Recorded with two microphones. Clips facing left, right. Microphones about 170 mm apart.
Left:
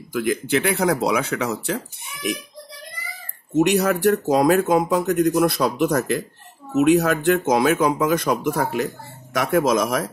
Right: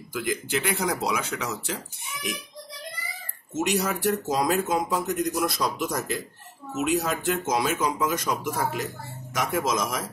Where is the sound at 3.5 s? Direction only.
60° left (ahead or behind).